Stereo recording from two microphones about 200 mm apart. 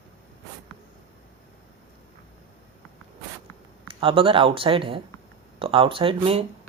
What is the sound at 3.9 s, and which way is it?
Speech, 25° right (ahead or behind).